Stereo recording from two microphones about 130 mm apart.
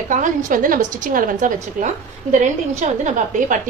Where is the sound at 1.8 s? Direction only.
65° right (ahead or behind).